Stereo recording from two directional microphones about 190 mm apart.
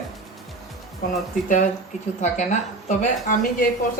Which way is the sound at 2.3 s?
40° left (ahead or behind).